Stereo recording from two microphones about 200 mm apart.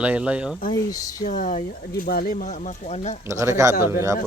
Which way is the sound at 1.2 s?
40° left (ahead or behind).